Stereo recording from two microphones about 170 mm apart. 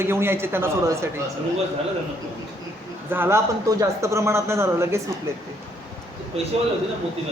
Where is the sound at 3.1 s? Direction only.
15° right (ahead or behind).